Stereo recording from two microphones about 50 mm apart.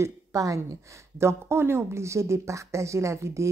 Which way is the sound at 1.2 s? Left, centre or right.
Right.